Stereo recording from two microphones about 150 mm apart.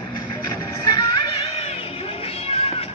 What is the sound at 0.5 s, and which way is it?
Music, 25° left (ahead or behind).